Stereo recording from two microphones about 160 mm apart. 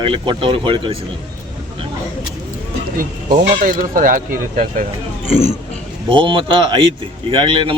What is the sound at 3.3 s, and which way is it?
Speech, 55° right (ahead or behind).